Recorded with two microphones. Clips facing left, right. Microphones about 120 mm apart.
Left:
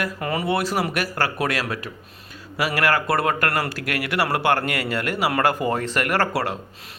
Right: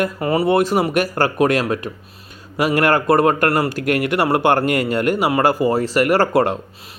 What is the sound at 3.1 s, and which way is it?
Speech, 40° right (ahead or behind).